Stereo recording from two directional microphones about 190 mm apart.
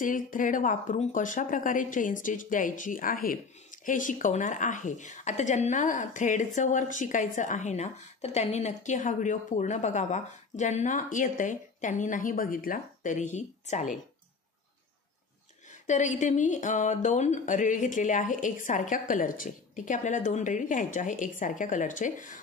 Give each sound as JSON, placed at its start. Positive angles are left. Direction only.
{"t": 0.0, "sound": "speech", "side_deg": 45}
{"t": 15.7, "sound": "speech", "side_deg": 40}